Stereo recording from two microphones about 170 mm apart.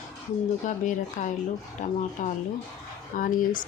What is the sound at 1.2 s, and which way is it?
Speech, 50° left (ahead or behind).